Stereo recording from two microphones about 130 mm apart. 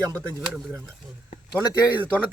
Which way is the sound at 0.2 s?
10° right (ahead or behind).